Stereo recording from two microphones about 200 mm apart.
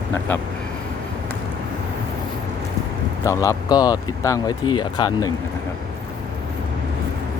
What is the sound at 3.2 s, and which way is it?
Speech, 15° left (ahead or behind).